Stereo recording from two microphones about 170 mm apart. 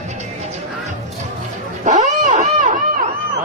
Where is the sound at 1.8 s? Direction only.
45° right (ahead or behind).